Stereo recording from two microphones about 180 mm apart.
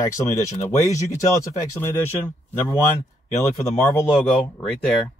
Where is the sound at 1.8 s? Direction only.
15° left (ahead or behind).